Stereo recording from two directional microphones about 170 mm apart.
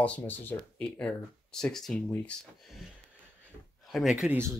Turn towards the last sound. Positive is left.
turn(degrees=0)  # may be behind; listen again after turning